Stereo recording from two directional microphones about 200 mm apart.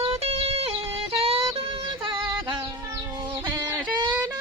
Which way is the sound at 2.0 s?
25° right (ahead or behind).